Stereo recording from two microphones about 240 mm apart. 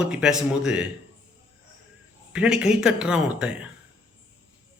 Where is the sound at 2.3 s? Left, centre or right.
Centre.